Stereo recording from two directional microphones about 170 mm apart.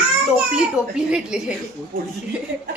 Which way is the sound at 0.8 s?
15° left (ahead or behind).